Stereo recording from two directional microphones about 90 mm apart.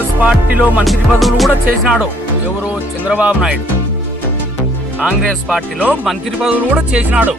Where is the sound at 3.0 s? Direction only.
15° right (ahead or behind).